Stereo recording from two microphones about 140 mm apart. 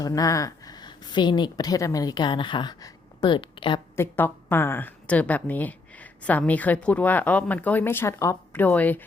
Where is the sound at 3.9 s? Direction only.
15° left (ahead or behind).